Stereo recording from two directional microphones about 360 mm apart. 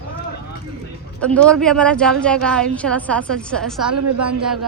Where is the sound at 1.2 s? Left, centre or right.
Centre.